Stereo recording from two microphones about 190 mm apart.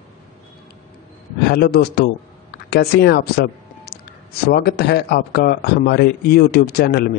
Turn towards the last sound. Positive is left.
turn(degrees=55)  # may be behind; listen again after turning